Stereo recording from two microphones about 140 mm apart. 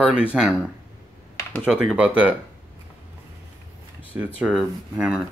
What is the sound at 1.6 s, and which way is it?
Speech, 5° right (ahead or behind).